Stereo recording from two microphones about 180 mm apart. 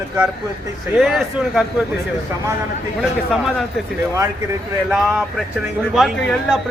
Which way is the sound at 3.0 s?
Centre (ahead or behind).